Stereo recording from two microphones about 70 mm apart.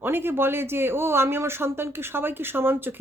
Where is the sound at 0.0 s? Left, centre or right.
Right.